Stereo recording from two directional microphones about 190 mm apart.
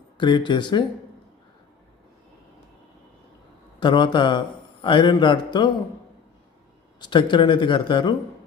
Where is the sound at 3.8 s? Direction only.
25° left (ahead or behind).